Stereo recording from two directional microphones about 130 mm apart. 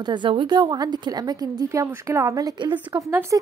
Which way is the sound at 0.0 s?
35° right (ahead or behind).